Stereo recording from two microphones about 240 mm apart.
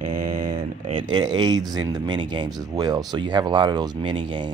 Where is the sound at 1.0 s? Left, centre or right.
Centre.